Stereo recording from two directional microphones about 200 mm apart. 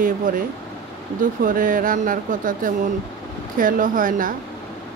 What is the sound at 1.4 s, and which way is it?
A woman's voice, 45° right (ahead or behind).